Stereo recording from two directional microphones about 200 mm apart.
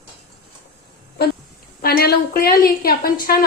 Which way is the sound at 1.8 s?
50° left (ahead or behind).